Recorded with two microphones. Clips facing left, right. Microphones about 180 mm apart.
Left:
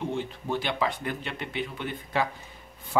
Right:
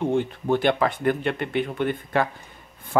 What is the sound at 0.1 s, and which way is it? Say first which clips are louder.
Speech: right 8 dB; 55° right (ahead or behind).